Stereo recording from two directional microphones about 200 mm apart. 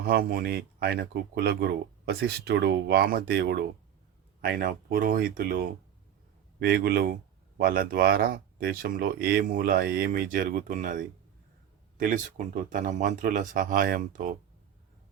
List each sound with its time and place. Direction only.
0.1 s speech: 45° right (ahead or behind)